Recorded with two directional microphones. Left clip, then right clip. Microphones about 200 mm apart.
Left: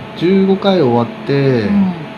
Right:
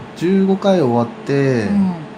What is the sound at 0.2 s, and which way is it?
Speech, 35° right (ahead or behind).